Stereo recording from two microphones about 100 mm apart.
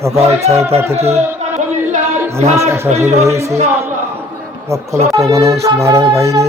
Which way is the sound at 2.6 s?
30° right (ahead or behind).